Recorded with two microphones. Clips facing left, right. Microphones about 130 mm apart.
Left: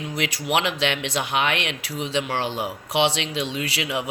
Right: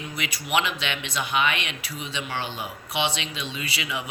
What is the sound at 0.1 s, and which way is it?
Speech, 90° left.